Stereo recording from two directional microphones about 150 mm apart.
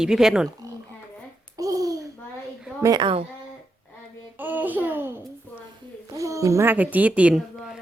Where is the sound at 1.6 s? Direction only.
20° right (ahead or behind).